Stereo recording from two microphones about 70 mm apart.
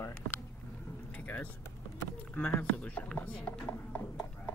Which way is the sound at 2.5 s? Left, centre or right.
Left.